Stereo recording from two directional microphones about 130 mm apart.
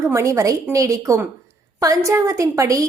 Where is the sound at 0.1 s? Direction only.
20° right (ahead or behind).